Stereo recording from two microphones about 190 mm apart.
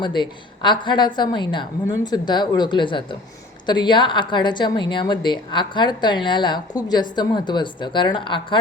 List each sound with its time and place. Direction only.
0.0 s a woman's voice: 25° left (ahead or behind)